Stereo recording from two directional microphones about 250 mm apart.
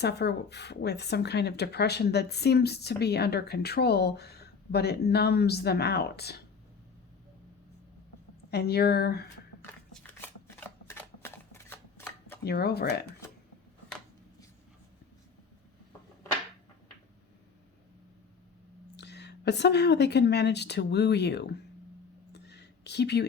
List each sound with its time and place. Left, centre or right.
0.0 s speech: left
8.4 s speech: left
9.6 s shuffling cards: centre
12.5 s speech: left
18.9 s a woman's voice: left
22.3 s a sound: left